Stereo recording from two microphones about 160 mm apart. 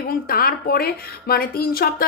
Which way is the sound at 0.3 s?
70° left (ahead or behind).